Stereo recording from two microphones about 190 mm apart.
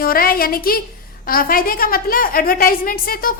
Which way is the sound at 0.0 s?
50° left (ahead or behind).